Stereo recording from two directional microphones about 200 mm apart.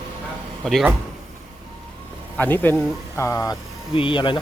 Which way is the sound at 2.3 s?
10° left (ahead or behind).